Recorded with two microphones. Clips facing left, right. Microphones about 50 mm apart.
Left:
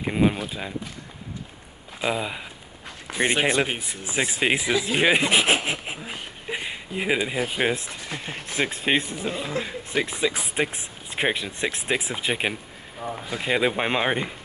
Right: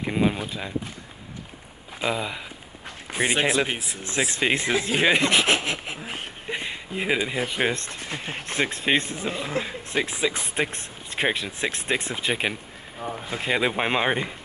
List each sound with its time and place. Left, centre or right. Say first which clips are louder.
0.0 s speech: left 1 dB; centre
2.0 s speech: left 1 dB; centre
8.1 s speech: right 1 dB; right
8.5 s speech: even; centre
13.0 s speech: even; right
13.4 s speech: left 1 dB; centre